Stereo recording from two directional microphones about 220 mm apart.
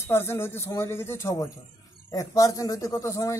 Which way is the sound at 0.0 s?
10° left (ahead or behind).